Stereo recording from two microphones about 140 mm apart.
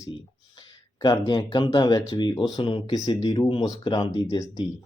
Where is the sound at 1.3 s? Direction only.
30° left (ahead or behind).